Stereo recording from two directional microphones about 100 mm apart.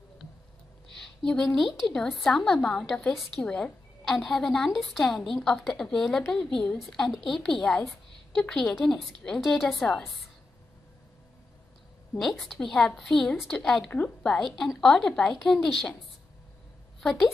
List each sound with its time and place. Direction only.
0.9 s a woman's voice: 5° left (ahead or behind)
12.2 s a woman's voice: centre (ahead or behind)